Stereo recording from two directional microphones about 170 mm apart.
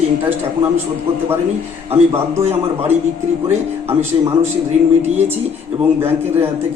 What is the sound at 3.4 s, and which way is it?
Speech, 20° right (ahead or behind).